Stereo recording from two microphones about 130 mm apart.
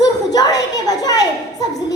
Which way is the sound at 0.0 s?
30° left (ahead or behind).